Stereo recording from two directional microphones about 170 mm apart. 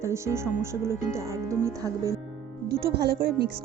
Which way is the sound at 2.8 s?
70° right (ahead or behind).